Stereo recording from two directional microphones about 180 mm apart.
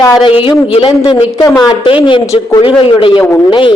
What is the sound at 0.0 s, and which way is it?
Speech, 25° left (ahead or behind).